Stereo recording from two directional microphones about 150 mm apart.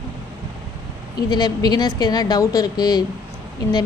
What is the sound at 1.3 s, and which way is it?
A woman's voice, 25° left (ahead or behind).